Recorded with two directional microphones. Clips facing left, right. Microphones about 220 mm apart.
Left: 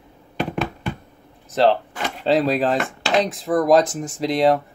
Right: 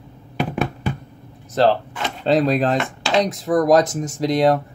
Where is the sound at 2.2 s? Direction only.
Centre (ahead or behind).